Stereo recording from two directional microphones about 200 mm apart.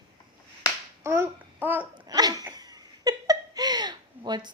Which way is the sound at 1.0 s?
10° right (ahead or behind).